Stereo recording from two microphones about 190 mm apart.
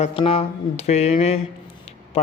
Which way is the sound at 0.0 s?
30° left (ahead or behind).